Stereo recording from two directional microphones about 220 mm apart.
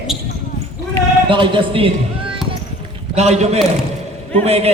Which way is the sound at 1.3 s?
20° right (ahead or behind).